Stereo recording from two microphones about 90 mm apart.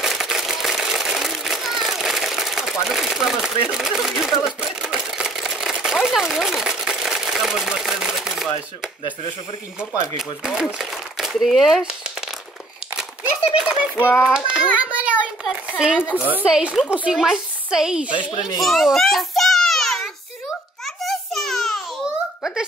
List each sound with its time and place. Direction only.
0.0 s a sound: 5° right (ahead or behind)
3.7 s speech: 5° right (ahead or behind)
4.5 s camera: 5° right (ahead or behind)
10.1 s speech: 5° right (ahead or behind)
13.5 s a sound: 10° right (ahead or behind)
13.9 s speech: 25° left (ahead or behind)
14.2 s a child's voice: 10° right (ahead or behind)
16.4 s speech: 5° right (ahead or behind)
18.6 s a sound: centre (ahead or behind)
22.0 s babbling: 5° right (ahead or behind)